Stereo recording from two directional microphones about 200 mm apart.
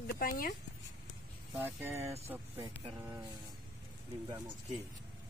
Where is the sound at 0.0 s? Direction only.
45° left (ahead or behind).